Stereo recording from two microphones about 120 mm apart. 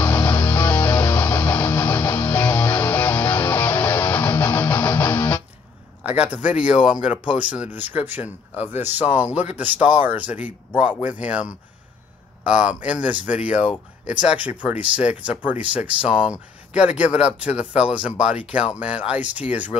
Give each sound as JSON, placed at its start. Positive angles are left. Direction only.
{"t": 0.0, "sound": "music", "side_deg": 20}
{"t": 6.0, "sound": "speech", "side_deg": -15}